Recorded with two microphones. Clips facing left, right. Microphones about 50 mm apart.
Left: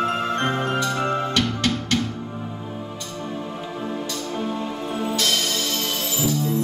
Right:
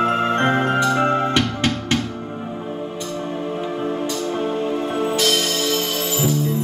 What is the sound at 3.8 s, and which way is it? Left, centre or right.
Music, right.